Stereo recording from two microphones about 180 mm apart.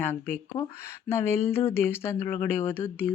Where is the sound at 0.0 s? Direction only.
10° left (ahead or behind).